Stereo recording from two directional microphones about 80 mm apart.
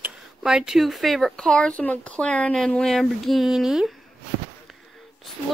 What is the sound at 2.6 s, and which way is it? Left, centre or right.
Speech, centre.